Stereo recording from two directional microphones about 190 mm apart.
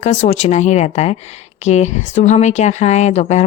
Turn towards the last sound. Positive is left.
turn(degrees=35)  # may be behind; listen again after turning